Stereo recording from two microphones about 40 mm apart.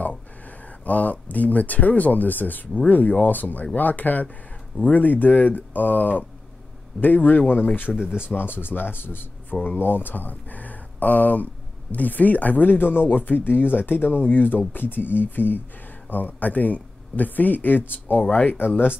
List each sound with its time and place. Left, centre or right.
0.8 s speech: left
7.9 s speech: centre
8.4 s speech: left
18.3 s speech: left